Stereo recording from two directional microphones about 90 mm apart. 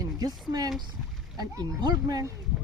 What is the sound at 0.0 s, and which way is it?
Speech, 45° right (ahead or behind).